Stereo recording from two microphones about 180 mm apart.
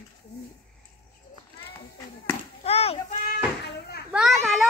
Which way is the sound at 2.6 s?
35° left (ahead or behind).